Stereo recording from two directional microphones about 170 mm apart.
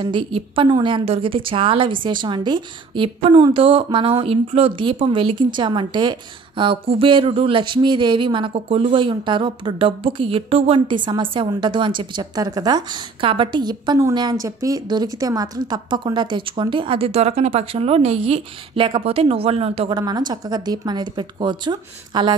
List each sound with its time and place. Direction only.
0.0 s a woman's voice: 30° right (ahead or behind)
19.9 s a woman's voice: 25° right (ahead or behind)